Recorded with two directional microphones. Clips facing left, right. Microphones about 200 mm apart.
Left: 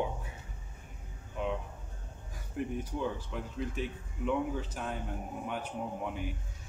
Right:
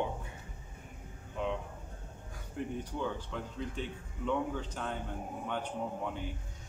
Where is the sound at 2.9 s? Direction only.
10° left (ahead or behind).